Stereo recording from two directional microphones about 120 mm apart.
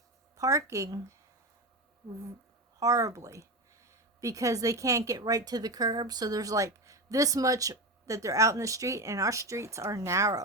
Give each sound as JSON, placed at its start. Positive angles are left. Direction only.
{"t": 0.3, "sound": "a woman's voice", "side_deg": -25}
{"t": 2.7, "sound": "a woman's voice", "side_deg": -30}